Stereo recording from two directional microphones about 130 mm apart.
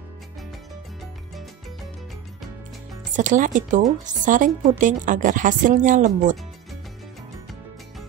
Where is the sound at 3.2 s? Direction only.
80° right.